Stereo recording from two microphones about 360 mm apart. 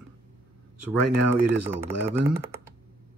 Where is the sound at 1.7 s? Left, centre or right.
Centre.